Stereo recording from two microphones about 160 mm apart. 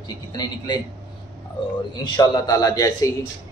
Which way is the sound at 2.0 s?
25° left (ahead or behind).